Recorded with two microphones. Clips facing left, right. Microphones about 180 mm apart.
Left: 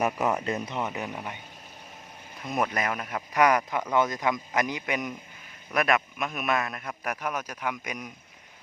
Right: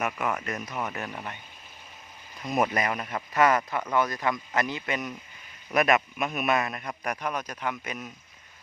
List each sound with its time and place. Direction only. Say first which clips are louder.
0.0 s speech: left 4 dB; 30° left (ahead or behind); by 1.4 s 15° left (ahead or behind)
2.6 s a man's voice: right 2 dB; 5° right (ahead or behind)
3.3 s a man's voice: even; 15° left (ahead or behind)
5.7 s a man's voice: right 2 dB; centre (ahead or behind); by 8.1 s 15° left (ahead or behind)